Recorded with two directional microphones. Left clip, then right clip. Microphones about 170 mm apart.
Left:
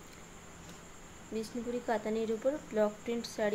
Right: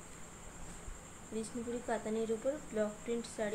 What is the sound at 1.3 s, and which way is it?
Speech, 55° left (ahead or behind).